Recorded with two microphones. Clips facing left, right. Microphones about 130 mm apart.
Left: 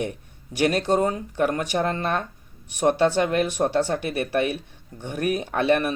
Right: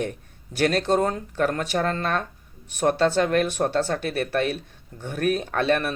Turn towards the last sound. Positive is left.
turn(degrees=15)  # may be behind; listen again after turning